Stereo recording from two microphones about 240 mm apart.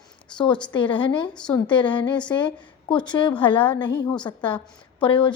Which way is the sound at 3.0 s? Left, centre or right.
Centre.